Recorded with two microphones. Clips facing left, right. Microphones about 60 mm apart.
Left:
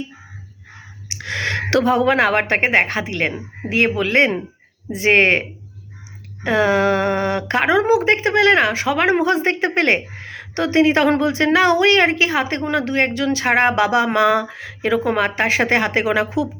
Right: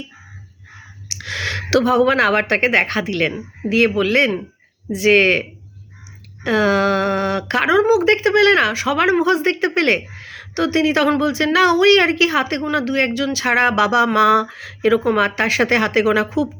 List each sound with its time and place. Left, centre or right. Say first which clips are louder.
1.0 s speech: left 1 dB; left